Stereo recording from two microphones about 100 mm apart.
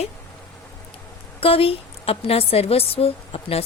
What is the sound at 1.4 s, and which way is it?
A woman's voice, 70° left (ahead or behind).